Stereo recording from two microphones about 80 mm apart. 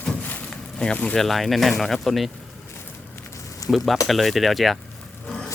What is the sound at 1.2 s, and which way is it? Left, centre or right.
Speech, centre.